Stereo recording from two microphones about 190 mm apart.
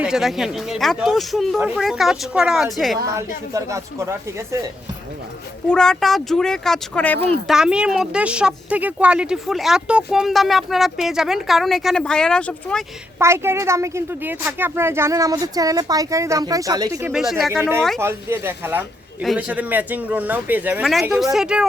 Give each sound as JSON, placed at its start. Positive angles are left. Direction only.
{"t": 0.0, "sound": "speech", "side_deg": 0}
{"t": 3.5, "sound": "a woman's voice", "side_deg": -15}
{"t": 5.6, "sound": "speech", "side_deg": 5}
{"t": 13.1, "sound": "a woman's voice", "side_deg": -15}
{"t": 17.1, "sound": "speech", "side_deg": 0}
{"t": 18.0, "sound": "a woman's voice", "side_deg": -10}